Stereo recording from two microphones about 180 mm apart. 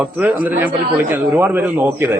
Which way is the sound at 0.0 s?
10° right (ahead or behind).